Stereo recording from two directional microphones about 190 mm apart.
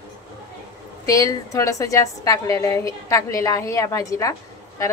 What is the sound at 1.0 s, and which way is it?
A woman's voice, 20° left (ahead or behind).